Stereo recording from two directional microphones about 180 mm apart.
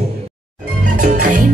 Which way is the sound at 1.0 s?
45° right (ahead or behind).